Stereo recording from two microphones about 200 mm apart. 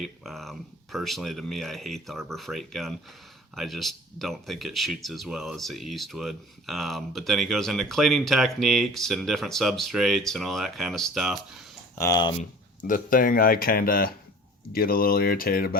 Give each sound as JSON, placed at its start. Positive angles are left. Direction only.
{"t": 0.0, "sound": "speech", "side_deg": 0}
{"t": 11.9, "sound": "speech", "side_deg": 20}
{"t": 12.9, "sound": "speech", "side_deg": 45}